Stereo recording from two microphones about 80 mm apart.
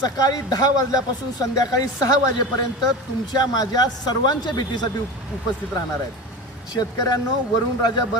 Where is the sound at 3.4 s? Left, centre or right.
Left.